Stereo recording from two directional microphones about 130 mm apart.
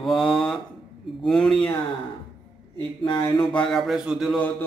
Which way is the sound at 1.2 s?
5° left (ahead or behind).